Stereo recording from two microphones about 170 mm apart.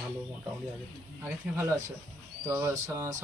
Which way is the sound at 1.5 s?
15° right (ahead or behind).